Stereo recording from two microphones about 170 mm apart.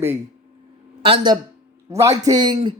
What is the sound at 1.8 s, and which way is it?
Speech, 15° right (ahead or behind).